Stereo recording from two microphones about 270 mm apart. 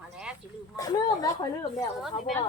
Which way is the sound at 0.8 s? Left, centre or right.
Centre.